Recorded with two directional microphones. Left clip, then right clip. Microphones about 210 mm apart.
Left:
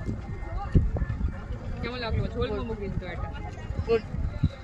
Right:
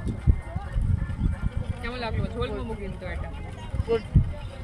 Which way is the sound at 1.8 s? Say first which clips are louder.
Right 1 dB; 20° right (ahead or behind).